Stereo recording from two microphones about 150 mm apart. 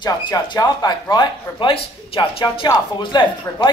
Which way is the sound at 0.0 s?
30° left (ahead or behind).